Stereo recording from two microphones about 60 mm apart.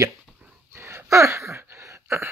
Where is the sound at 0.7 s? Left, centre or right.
Right.